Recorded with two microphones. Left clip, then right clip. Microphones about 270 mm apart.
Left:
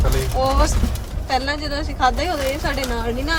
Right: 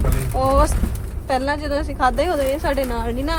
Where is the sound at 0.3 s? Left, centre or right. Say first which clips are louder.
Right 3 dB; right.